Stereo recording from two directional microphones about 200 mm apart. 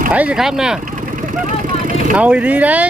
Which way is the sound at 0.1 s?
5° right (ahead or behind).